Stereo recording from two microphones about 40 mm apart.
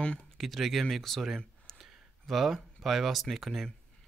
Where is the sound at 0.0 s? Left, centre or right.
Left.